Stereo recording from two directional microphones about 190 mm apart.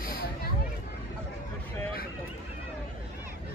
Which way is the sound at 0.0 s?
50° left (ahead or behind).